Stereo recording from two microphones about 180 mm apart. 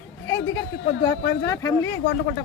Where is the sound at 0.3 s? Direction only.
20° left (ahead or behind).